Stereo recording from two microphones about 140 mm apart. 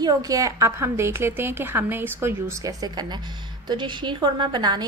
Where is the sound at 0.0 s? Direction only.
25° right (ahead or behind).